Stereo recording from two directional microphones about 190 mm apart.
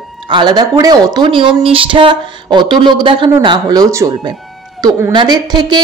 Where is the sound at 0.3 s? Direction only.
20° right (ahead or behind).